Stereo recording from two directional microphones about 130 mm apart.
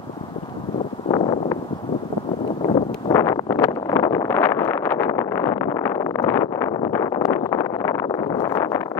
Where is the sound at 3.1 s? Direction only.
25° left (ahead or behind).